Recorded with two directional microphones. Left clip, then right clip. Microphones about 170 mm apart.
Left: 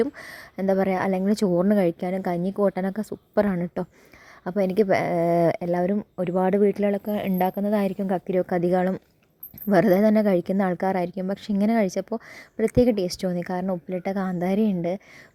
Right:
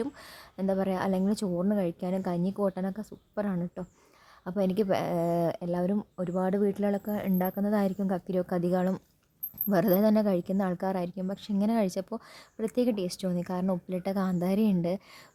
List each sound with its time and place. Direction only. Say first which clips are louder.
0.0 s a woman's voice: left 10 dB; 30° left (ahead or behind)